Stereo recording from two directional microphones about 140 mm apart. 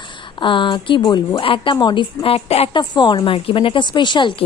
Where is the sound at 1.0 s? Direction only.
20° left (ahead or behind).